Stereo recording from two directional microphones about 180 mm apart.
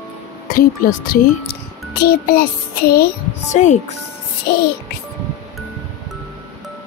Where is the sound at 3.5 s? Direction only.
40° left (ahead or behind).